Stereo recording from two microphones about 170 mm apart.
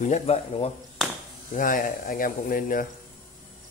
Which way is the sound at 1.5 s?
55° left (ahead or behind).